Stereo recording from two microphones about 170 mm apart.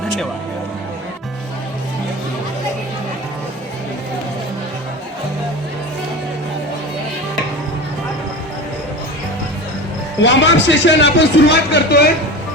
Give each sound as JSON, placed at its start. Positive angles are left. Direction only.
{"t": 10.2, "sound": "speech", "side_deg": 90}